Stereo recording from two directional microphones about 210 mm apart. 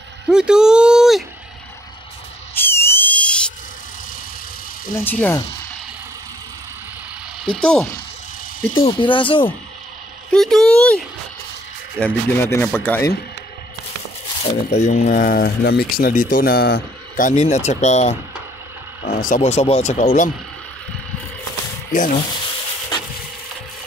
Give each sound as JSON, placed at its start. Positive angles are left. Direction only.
{"t": 0.3, "sound": "speech", "side_deg": -5}
{"t": 2.5, "sound": "a sound", "side_deg": 10}
{"t": 4.9, "sound": "speech", "side_deg": 10}
{"t": 7.6, "sound": "speech", "side_deg": 5}
{"t": 8.7, "sound": "speech", "side_deg": 25}
{"t": 10.3, "sound": "speech", "side_deg": 0}
{"t": 14.4, "sound": "speech", "side_deg": 35}
{"t": 17.3, "sound": "speech", "side_deg": 35}
{"t": 19.1, "sound": "speech", "side_deg": 40}
{"t": 21.9, "sound": "speech", "side_deg": 40}